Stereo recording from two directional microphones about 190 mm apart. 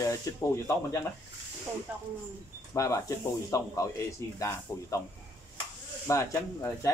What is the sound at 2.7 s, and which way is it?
Speech, 15° left (ahead or behind).